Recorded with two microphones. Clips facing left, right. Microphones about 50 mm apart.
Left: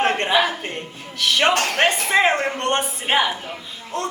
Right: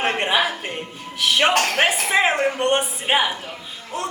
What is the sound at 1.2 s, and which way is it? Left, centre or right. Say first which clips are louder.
Speech: even; centre.